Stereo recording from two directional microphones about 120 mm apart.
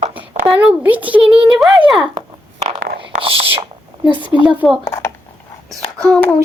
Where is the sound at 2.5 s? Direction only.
55° right (ahead or behind).